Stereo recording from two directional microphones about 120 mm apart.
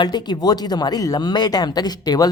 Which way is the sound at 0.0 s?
35° left (ahead or behind).